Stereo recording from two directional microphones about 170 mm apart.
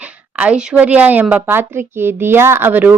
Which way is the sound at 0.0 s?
10° right (ahead or behind).